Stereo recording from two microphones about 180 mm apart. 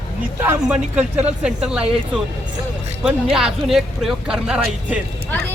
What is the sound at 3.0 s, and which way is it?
Speech, 5° right (ahead or behind).